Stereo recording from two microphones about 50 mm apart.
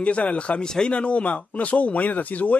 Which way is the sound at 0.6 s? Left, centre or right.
Centre.